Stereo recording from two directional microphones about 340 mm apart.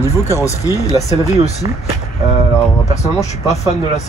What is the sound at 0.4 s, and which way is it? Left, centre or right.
Speech, centre.